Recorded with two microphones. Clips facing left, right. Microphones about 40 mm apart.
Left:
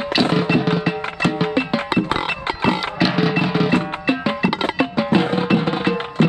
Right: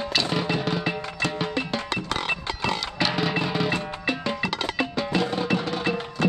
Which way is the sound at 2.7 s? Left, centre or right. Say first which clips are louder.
Left 5 dB; centre.